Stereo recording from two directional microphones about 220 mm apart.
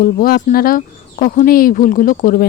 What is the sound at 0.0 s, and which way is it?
Speech, 40° left (ahead or behind).